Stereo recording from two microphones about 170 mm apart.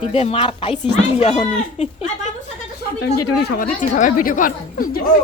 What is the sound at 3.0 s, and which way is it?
Speech, 70° left (ahead or behind).